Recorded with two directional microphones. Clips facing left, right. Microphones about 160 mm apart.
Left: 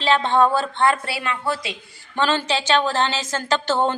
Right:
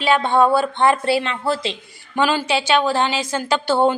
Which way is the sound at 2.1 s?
10° right (ahead or behind).